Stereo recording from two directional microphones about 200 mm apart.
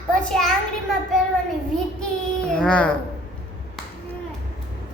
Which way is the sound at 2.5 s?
5° left (ahead or behind).